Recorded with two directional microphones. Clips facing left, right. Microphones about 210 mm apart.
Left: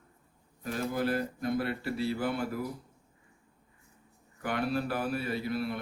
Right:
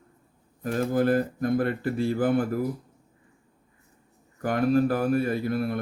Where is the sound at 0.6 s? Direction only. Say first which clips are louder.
Right 7 dB; 50° right (ahead or behind).